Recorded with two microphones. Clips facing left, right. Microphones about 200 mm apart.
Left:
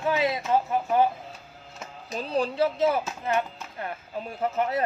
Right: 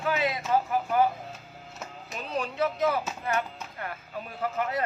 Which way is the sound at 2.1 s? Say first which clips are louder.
Left 5 dB; 35° left (ahead or behind).